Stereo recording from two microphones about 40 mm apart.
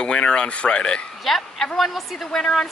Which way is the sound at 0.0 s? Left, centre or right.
Left.